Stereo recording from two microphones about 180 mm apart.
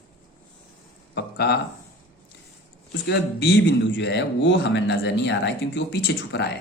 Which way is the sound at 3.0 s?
70° left (ahead or behind).